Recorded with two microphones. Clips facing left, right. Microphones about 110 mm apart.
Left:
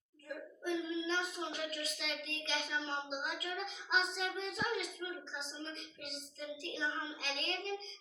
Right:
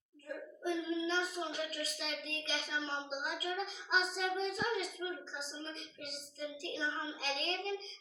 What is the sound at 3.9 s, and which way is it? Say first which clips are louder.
Child singing: right 2 dB; 35° right (ahead or behind).